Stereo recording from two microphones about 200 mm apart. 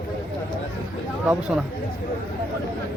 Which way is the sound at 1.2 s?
5° right (ahead or behind).